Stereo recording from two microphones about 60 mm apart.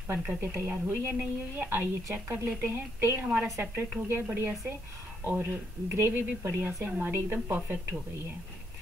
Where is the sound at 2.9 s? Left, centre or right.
Right.